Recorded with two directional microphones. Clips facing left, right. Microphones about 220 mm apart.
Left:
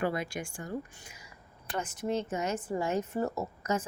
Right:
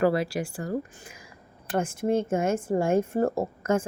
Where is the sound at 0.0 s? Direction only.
35° right (ahead or behind).